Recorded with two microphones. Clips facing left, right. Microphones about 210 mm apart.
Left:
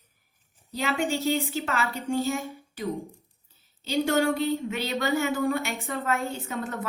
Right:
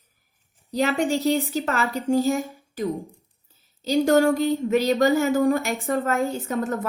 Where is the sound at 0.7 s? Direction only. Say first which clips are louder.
Right 5 dB; 45° right (ahead or behind).